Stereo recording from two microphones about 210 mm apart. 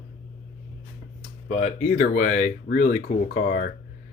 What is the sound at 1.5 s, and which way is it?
Speech, 35° left (ahead or behind).